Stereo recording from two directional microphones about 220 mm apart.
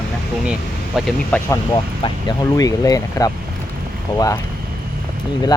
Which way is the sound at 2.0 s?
15° left (ahead or behind).